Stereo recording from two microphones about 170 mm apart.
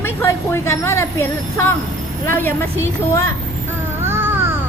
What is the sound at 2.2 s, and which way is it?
A woman's voice, 15° left (ahead or behind).